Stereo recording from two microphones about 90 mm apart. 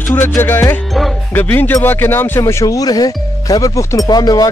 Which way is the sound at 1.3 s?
20° left (ahead or behind).